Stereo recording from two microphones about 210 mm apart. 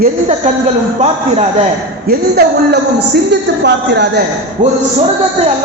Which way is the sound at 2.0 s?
50° right (ahead or behind).